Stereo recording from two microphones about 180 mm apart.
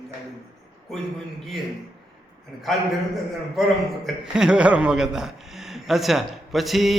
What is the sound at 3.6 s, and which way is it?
A man's voice, 5° right (ahead or behind).